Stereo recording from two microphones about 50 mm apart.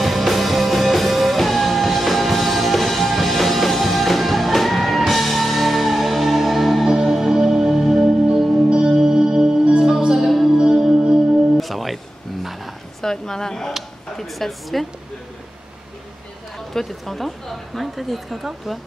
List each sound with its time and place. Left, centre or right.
0.0 s music: centre
13.0 s a sound: centre
16.5 s a woman's voice: centre